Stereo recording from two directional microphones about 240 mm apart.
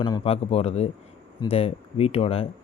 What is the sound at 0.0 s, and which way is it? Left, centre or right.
Speech, left.